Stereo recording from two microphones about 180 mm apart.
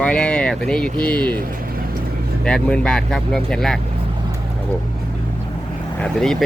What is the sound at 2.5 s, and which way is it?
Speech, 5° left (ahead or behind).